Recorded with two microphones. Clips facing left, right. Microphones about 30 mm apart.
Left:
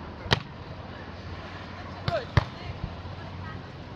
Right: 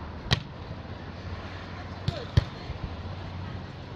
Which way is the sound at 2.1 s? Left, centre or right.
Left.